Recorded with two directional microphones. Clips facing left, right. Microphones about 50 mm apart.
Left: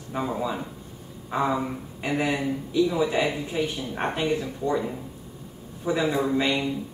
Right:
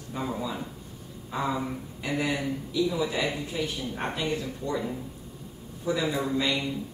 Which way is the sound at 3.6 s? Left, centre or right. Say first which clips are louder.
Left 5 dB; left.